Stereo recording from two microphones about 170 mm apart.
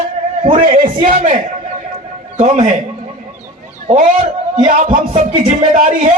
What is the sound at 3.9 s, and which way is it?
Speech, 50° right (ahead or behind).